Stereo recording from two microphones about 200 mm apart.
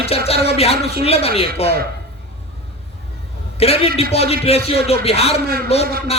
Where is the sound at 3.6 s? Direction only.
30° left (ahead or behind).